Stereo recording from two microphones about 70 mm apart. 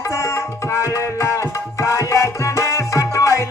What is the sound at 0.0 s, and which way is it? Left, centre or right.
Tabla, left.